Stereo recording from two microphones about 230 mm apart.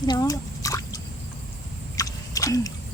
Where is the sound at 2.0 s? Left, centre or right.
Centre.